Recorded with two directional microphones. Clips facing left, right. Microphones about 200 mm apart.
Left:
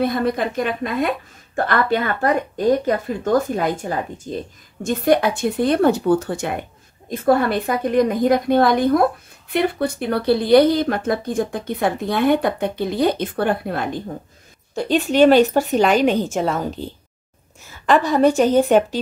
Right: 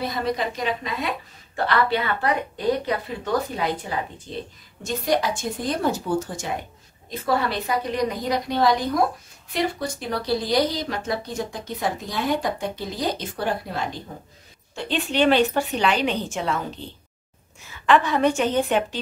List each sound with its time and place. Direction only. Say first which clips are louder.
0.0 s a woman's voice: left 6 dB; 55° left (ahead or behind)
4.8 s a woman's voice: left 6 dB; 55° left (ahead or behind)
14.8 s a woman's voice: left 8 dB; 45° left (ahead or behind)